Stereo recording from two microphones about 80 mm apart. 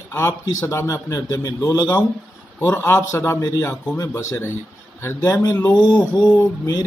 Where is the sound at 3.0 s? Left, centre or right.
Left.